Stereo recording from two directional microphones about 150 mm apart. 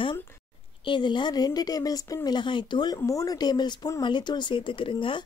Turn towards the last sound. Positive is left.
turn(degrees=35)  # may be behind; listen again after turning